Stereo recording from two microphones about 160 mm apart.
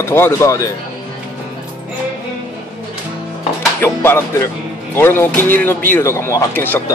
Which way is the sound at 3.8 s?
15° left (ahead or behind).